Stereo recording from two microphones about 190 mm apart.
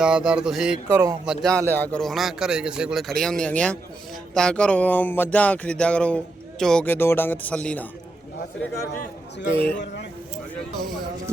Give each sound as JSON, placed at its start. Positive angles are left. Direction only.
{"t": 0.0, "sound": "speech", "side_deg": -5}
{"t": 0.9, "sound": "speech", "side_deg": -15}
{"t": 1.2, "sound": "speech", "side_deg": 0}
{"t": 9.7, "sound": "speech", "side_deg": 60}
{"t": 10.3, "sound": "speech", "side_deg": 0}